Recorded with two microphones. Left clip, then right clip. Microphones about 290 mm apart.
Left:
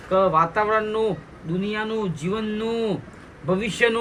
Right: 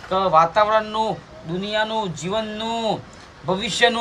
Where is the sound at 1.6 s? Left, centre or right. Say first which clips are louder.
Right 4 dB; centre.